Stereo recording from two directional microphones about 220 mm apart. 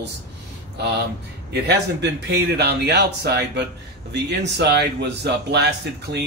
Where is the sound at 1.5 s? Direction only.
50° right (ahead or behind).